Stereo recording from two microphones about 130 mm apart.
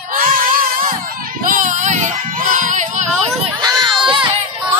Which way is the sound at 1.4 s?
85° right.